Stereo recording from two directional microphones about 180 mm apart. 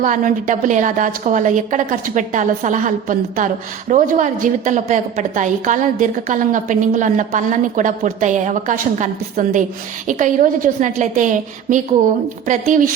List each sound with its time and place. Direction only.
0.0 s a woman's voice: 45° right (ahead or behind)